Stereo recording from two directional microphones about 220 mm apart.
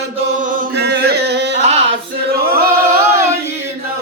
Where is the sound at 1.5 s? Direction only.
30° right (ahead or behind).